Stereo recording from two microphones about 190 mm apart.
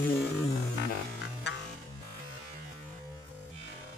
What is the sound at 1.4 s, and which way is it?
Music, 65° left (ahead or behind).